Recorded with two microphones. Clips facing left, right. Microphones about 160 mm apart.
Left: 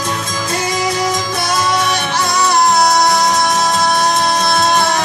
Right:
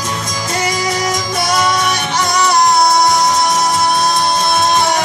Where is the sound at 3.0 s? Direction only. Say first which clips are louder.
Right 1 dB; 20° right (ahead or behind).